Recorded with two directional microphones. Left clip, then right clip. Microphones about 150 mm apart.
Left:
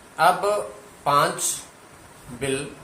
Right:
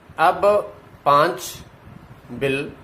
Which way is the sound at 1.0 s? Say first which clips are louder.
Right 4 dB; 75° right (ahead or behind).